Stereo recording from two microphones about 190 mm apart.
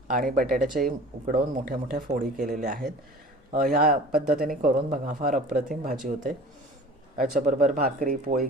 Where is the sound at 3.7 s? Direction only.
50° right (ahead or behind).